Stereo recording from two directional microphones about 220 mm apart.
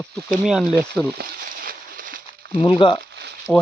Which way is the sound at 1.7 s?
40° right (ahead or behind).